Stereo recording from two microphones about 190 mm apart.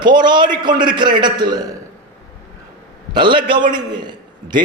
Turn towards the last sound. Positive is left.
turn(degrees=-25)  # may be behind; listen again after turning